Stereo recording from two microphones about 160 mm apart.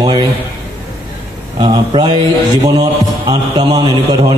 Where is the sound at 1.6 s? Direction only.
30° right (ahead or behind).